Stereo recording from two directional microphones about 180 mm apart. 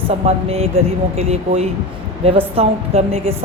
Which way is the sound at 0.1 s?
35° right (ahead or behind).